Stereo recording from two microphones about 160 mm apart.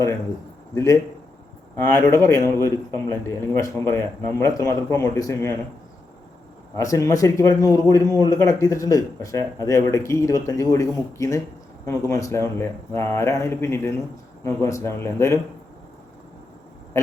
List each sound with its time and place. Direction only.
0.7 s a man's voice: 20° left (ahead or behind)
6.7 s a man's voice: 20° left (ahead or behind)